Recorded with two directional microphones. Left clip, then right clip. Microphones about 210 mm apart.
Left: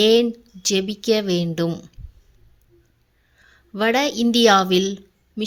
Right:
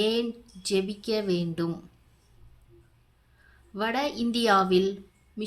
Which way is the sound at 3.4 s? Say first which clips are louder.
Left 9 dB; 35° left (ahead or behind).